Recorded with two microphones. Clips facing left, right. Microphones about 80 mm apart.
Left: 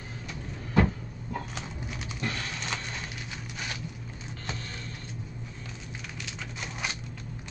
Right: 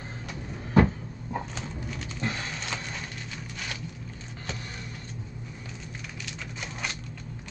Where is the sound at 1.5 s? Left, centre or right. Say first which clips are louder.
Right 2 dB; centre.